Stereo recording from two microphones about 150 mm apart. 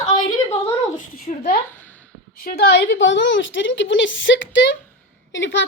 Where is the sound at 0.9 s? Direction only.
65° left (ahead or behind).